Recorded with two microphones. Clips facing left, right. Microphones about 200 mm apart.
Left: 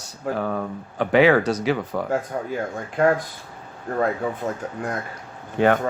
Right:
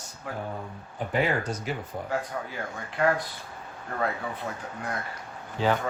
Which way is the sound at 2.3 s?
45° left (ahead or behind).